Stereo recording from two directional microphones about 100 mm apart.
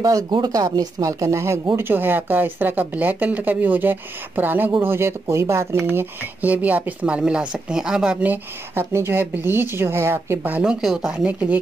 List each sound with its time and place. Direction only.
0.3 s speech: 40° right (ahead or behind); by 10.6 s 20° right (ahead or behind)
10.6 s speech: 5° right (ahead or behind)
11.2 s speech: 15° right (ahead or behind)